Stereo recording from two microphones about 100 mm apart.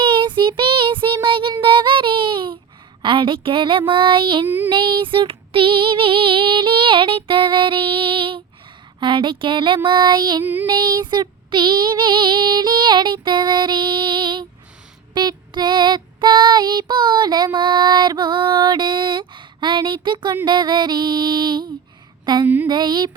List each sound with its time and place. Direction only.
0.0 s child singing: 55° right (ahead or behind)
3.0 s female singing: 55° right (ahead or behind)
4.4 s child singing: 20° right (ahead or behind)
4.7 s female singing: 55° right (ahead or behind)
9.0 s child singing: 55° right (ahead or behind)
10.4 s child singing: 20° right (ahead or behind)
10.7 s child singing: 50° right (ahead or behind)